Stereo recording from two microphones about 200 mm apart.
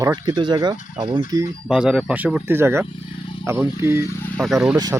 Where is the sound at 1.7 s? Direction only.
5° right (ahead or behind).